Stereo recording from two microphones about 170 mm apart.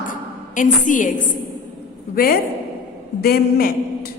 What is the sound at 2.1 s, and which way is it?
A woman's voice, 60° left (ahead or behind).